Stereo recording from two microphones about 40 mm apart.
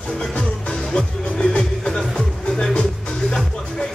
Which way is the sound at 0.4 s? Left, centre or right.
Centre.